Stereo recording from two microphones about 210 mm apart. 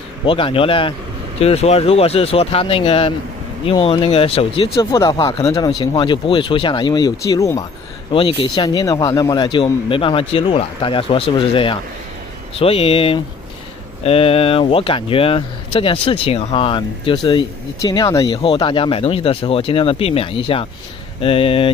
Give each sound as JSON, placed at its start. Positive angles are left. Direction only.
{"t": 0.2, "sound": "speech", "side_deg": 25}
{"t": 4.7, "sound": "speech", "side_deg": 15}